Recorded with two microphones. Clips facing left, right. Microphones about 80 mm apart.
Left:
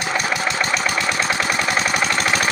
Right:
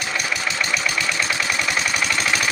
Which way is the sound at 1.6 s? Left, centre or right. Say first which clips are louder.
Left 3 dB; left.